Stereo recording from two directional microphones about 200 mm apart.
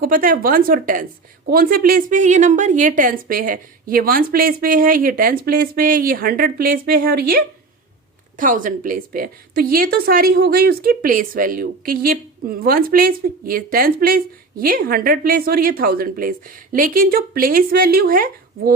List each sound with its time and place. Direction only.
0.0 s a woman's voice: 45° right (ahead or behind)